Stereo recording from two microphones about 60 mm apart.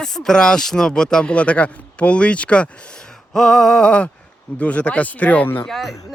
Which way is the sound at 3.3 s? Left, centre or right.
Centre.